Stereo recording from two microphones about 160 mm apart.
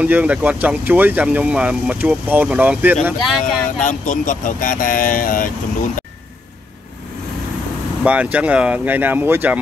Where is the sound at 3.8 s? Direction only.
55° left (ahead or behind).